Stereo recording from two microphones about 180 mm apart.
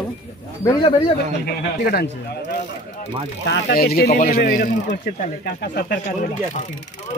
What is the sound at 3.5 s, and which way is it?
A man's voice, 80° left.